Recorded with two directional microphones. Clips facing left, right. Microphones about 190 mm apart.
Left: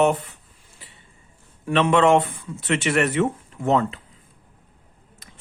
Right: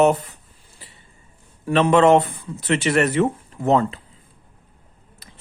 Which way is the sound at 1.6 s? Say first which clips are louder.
Right 3 dB; 35° right (ahead or behind).